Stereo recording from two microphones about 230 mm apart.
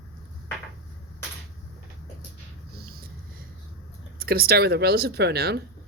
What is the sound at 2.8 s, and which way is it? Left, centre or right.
Vehicle, right.